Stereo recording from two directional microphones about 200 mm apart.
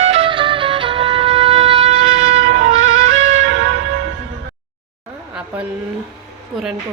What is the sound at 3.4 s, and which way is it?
Church bell, 70° right (ahead or behind).